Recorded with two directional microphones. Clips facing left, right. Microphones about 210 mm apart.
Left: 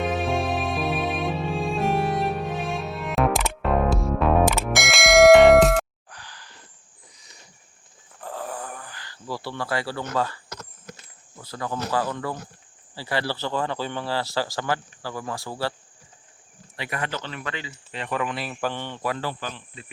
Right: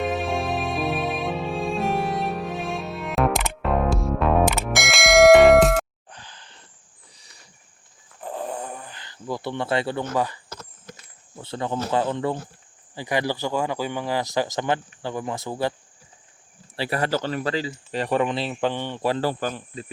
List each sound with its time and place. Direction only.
0.0 s music: centre (ahead or behind)
6.1 s a sound: 20° right (ahead or behind)
8.2 s a sound: 20° right (ahead or behind)
10.2 s speech: 15° right (ahead or behind)
16.7 s speech: 35° right (ahead or behind); by 19.0 s 15° right (ahead or behind)
19.0 s speech: 30° right (ahead or behind)
19.3 s speech: 45° right (ahead or behind)